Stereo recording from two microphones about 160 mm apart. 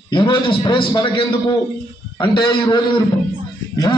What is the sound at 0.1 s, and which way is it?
A man's voice, 30° left (ahead or behind).